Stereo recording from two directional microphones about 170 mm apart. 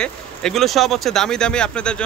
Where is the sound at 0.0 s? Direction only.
5° left (ahead or behind).